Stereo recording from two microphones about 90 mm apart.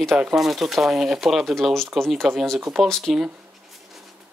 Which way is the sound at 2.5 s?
10° right (ahead or behind).